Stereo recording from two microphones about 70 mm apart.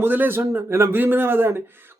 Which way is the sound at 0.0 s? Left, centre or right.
Right.